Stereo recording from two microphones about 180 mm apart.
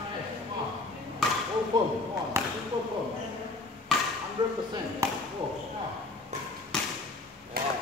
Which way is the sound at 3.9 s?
5° left (ahead or behind).